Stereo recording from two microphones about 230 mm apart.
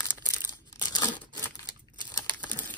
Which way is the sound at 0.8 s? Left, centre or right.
Centre.